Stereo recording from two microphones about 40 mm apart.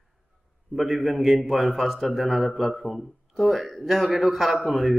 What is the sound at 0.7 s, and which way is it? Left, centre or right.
Speech, centre.